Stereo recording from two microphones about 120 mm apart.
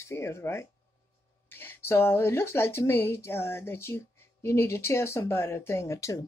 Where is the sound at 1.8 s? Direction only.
20° left (ahead or behind).